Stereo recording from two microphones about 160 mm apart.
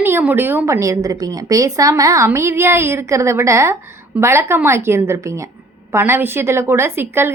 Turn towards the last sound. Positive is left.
turn(degrees=-15)  # may be behind; listen again after turning